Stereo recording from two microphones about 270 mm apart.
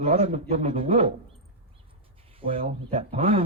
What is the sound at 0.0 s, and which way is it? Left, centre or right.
A man's voice, right.